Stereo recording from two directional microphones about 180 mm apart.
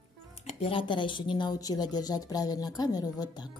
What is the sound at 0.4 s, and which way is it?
Speech, 30° left (ahead or behind).